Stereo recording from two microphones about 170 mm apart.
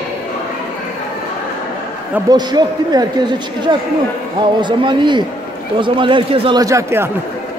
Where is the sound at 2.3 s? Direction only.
25° right (ahead or behind).